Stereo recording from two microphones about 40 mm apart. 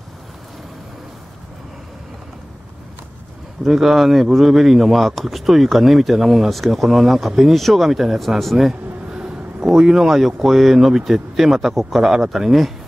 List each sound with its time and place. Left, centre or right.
3.6 s speech: centre
9.1 s a sound: centre
9.8 s speech: centre